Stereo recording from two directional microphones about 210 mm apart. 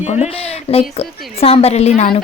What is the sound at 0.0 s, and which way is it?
Speech, 30° left (ahead or behind).